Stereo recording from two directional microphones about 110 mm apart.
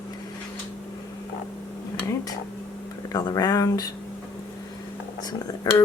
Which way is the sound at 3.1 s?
35° left (ahead or behind).